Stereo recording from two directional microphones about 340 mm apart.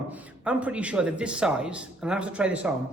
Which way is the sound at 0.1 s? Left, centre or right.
Centre.